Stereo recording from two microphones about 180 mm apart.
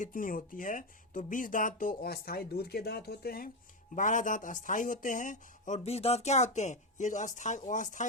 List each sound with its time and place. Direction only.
0.0 s speech: 50° left (ahead or behind)
3.9 s speech: 45° left (ahead or behind)